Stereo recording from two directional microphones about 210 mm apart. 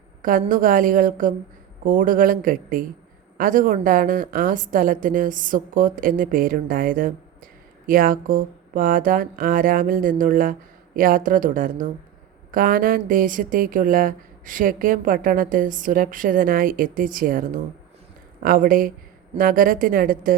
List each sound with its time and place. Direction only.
0.2 s speech: 40° right (ahead or behind)